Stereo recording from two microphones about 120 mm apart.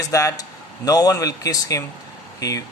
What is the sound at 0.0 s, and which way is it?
Speech, 25° left (ahead or behind).